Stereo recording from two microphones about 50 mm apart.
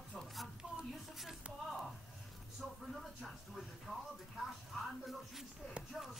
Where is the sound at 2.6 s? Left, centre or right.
Centre.